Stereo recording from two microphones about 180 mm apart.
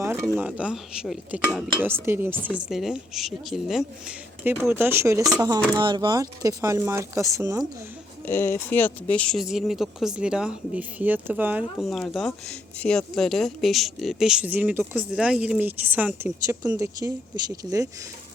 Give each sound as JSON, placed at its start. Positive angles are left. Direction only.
{"t": 0.0, "sound": "speech", "side_deg": -15}
{"t": 8.3, "sound": "speech", "side_deg": 15}